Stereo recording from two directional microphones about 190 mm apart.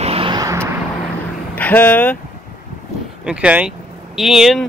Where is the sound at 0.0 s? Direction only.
30° right (ahead or behind); by 0.7 s 15° right (ahead or behind).